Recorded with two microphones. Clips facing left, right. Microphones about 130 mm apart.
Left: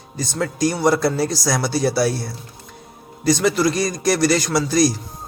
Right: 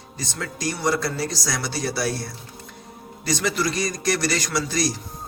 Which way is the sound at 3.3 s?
40° left (ahead or behind).